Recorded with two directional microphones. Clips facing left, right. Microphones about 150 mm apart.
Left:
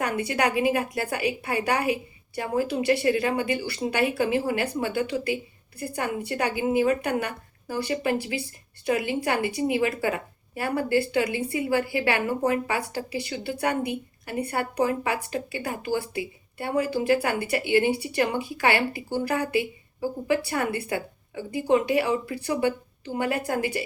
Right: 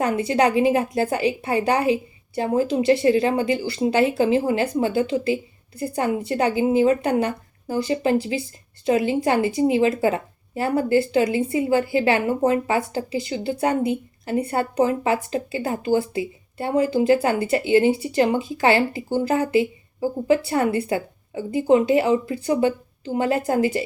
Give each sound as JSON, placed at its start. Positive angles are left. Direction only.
{"t": 0.0, "sound": "a woman's voice", "side_deg": -25}